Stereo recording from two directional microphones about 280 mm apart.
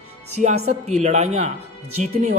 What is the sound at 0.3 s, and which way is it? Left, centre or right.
A man's voice, right.